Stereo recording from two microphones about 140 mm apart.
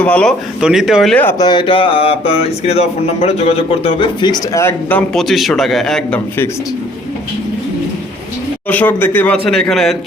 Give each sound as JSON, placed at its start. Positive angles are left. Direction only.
{"t": 0.0, "sound": "a man's voice", "side_deg": 10}
{"t": 0.6, "sound": "a man's voice", "side_deg": -5}
{"t": 1.1, "sound": "a man's voice", "side_deg": 15}
{"t": 1.4, "sound": "speech", "side_deg": 30}
{"t": 5.2, "sound": "a man's voice", "side_deg": 0}
{"t": 8.7, "sound": "a man's voice", "side_deg": 10}